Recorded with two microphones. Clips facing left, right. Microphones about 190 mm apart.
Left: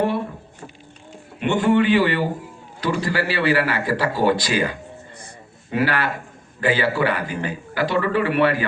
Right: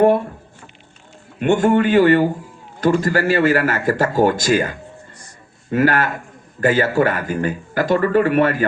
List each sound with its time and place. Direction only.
1.4 s speech: 45° right (ahead or behind)